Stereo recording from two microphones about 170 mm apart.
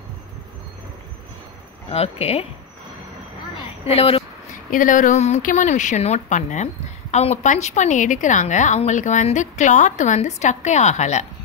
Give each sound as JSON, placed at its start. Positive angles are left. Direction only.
{"t": 1.9, "sound": "speech", "side_deg": 40}
{"t": 3.8, "sound": "speech", "side_deg": 35}
{"t": 4.6, "sound": "speech", "side_deg": 50}